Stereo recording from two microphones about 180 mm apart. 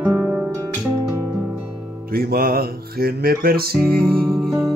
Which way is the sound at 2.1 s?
55° right (ahead or behind).